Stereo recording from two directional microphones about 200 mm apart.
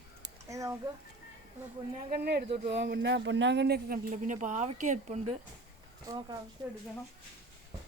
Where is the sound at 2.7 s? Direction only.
60° right (ahead or behind); by 5.3 s 35° right (ahead or behind).